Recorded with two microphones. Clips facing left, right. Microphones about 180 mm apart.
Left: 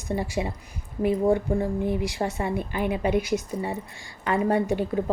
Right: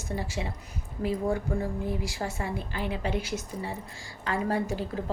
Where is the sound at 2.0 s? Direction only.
20° left (ahead or behind).